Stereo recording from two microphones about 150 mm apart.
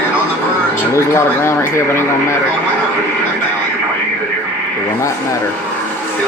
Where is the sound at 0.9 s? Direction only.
20° left (ahead or behind).